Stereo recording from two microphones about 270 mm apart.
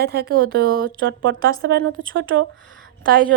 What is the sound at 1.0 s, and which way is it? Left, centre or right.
Speech, right.